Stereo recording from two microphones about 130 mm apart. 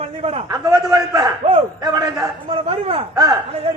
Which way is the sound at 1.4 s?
45° right (ahead or behind).